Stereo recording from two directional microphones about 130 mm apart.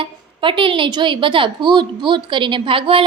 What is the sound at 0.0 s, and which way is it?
A woman's voice, 40° right (ahead or behind).